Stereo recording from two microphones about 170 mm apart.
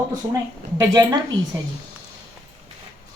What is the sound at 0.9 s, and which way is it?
Speech, 20° right (ahead or behind).